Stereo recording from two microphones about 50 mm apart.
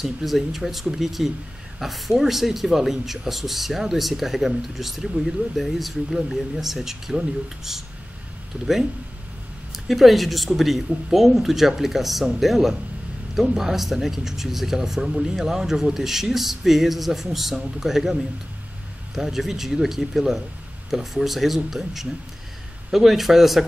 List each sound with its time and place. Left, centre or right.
0.0 s speech: centre
9.7 s a woman's voice: centre
19.1 s speech: centre